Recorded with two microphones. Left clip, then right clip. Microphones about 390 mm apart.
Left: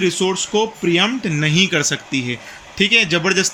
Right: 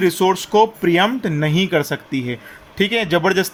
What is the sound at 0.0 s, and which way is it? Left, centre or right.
Speech, right.